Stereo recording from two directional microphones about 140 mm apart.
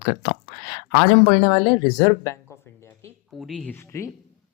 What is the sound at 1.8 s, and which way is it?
Speech, 25° left (ahead or behind).